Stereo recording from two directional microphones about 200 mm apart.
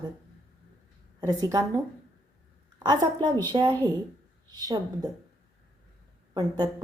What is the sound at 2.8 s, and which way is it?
A woman's voice, 20° right (ahead or behind).